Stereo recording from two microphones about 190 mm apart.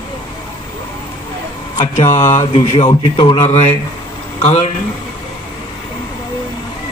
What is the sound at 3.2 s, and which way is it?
Speech, 25° left (ahead or behind).